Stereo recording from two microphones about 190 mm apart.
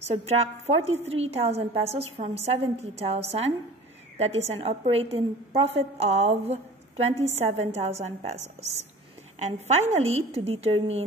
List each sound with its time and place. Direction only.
0.1 s a woman's voice: 35° right (ahead or behind)
9.4 s a woman's voice: 35° right (ahead or behind)